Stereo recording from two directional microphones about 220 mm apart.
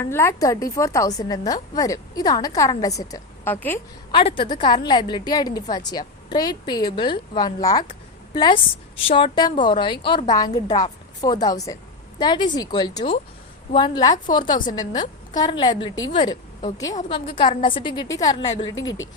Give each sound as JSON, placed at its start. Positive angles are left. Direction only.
{"t": 0.0, "sound": "a woman's voice", "side_deg": 10}
{"t": 4.1, "sound": "a woman's voice", "side_deg": 25}